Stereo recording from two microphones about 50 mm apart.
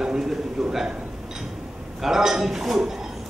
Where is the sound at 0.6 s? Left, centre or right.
Centre.